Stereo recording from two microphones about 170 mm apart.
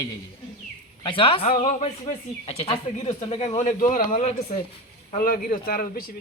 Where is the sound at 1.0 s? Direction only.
30° left (ahead or behind); by 6.1 s 60° left (ahead or behind).